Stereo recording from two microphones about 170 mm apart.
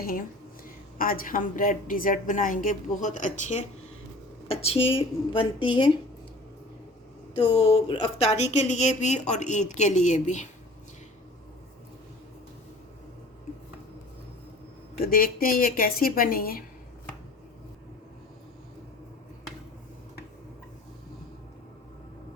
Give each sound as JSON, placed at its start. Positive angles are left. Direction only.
{"t": 0.0, "sound": "a woman's voice", "side_deg": 55}
{"t": 4.4, "sound": "speech", "side_deg": 35}
{"t": 7.3, "sound": "speech", "side_deg": 35}
{"t": 15.0, "sound": "a woman's voice", "side_deg": 55}